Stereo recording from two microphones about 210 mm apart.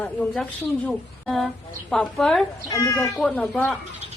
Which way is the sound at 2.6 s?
15° left (ahead or behind).